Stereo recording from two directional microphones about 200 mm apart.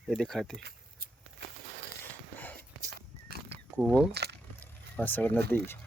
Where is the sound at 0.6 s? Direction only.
55° right (ahead or behind).